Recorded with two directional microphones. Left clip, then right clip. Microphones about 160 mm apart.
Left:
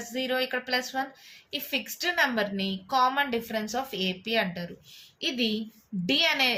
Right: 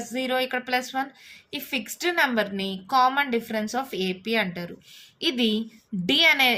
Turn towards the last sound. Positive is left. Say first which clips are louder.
# right 5 dB
turn(degrees=-45)  # may be behind; listen again after turning